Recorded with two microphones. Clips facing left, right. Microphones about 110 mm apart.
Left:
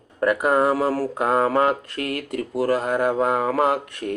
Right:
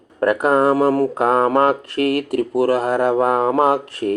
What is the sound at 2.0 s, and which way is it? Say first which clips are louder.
Speech: right 9 dB; 80° right.